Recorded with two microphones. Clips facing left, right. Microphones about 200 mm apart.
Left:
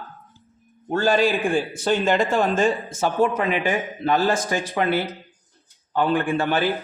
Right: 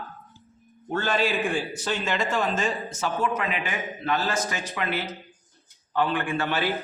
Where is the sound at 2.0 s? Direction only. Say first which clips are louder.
Left 5 dB; 55° left (ahead or behind).